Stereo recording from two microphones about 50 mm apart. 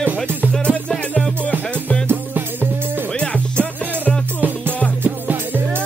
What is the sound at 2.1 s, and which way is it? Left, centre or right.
Music, right.